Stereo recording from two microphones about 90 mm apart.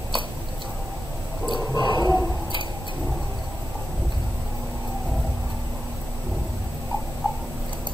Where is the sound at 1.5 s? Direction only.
55° left (ahead or behind).